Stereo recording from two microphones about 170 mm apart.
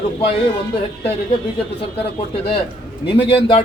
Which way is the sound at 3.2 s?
30° left (ahead or behind).